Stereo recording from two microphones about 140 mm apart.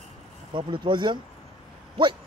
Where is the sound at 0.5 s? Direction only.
35° right (ahead or behind).